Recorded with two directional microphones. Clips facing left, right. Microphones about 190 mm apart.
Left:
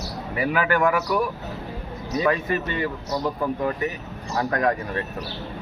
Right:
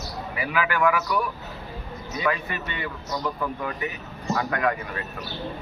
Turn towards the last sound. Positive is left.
turn(degrees=40)  # may be behind; listen again after turning